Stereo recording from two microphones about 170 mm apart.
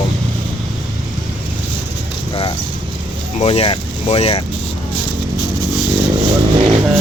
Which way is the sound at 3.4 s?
35° left (ahead or behind).